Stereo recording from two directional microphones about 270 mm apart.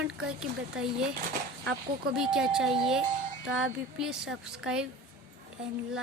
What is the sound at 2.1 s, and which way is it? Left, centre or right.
Speech, centre.